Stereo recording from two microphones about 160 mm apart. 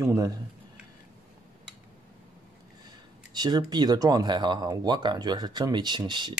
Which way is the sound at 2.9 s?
25° right (ahead or behind).